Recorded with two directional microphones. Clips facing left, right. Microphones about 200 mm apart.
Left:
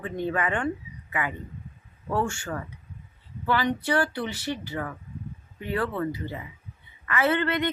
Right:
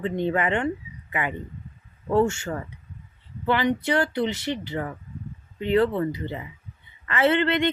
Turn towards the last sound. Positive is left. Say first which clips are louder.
# right 3 dB
turn(degrees=-25)  # may be behind; listen again after turning